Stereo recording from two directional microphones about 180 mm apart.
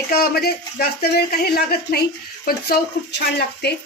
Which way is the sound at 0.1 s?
60° left (ahead or behind).